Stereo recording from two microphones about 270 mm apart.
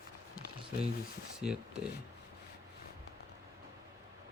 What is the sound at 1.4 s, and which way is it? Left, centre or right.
Speech, centre.